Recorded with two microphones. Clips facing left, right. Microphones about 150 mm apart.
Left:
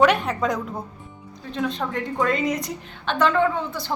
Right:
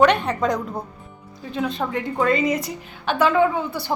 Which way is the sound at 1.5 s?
5° right (ahead or behind).